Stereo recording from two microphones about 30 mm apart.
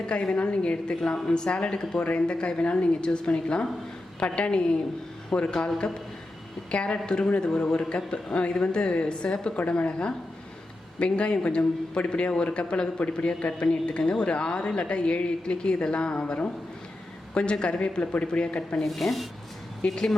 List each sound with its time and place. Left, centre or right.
0.3 s a woman's voice: left
1.0 s a woman's voice: left
2.0 s a woman's voice: left
5.5 s speech: left
6.7 s a woman's voice: left
18.8 s speech: centre
19.8 s a woman's voice: left